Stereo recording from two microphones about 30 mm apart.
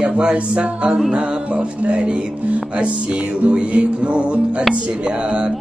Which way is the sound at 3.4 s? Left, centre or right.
Right.